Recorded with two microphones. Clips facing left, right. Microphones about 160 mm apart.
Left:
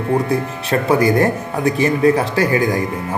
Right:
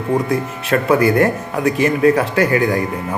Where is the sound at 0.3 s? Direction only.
35° left (ahead or behind).